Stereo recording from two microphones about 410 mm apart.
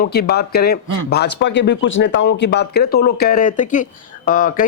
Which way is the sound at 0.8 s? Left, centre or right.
Right.